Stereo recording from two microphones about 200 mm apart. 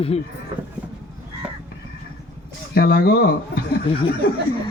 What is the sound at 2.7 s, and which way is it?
A man's voice, 50° left (ahead or behind).